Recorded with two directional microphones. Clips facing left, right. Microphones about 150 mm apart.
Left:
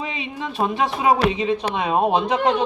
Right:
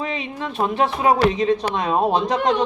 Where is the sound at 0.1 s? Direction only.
15° left (ahead or behind).